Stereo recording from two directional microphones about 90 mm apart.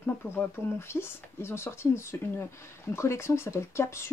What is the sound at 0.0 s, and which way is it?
Speech, 25° left (ahead or behind).